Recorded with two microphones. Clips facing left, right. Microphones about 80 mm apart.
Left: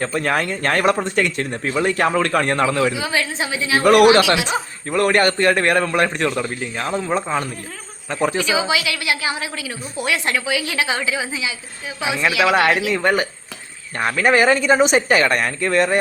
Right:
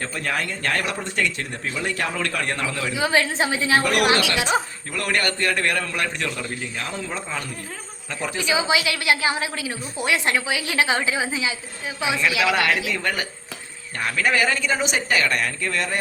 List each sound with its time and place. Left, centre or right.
0.0 s a man's voice: left
0.5 s speech: left
3.0 s a woman's voice: right
3.6 s a woman's voice: right
4.1 s a man's voice: left
4.4 s speech: right
4.9 s a man's voice: left
8.5 s a woman's voice: right
12.0 s speech: left
12.9 s speech: left